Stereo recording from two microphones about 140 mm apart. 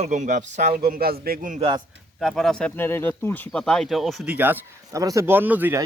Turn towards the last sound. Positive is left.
turn(degrees=-15)  # may be behind; listen again after turning